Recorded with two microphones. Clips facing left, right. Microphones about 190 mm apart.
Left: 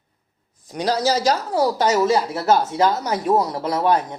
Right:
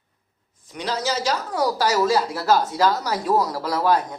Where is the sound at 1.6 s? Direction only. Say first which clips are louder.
Left 1 dB; 25° left (ahead or behind).